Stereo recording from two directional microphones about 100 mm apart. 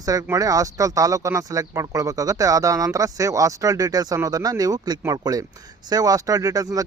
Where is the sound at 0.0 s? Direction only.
35° right (ahead or behind).